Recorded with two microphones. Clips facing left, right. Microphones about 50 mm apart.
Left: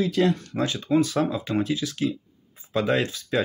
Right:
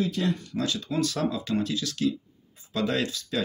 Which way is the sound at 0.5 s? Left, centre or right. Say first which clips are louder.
Left 7 dB; left.